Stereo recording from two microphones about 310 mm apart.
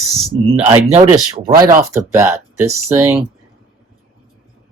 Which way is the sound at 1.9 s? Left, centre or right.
Centre.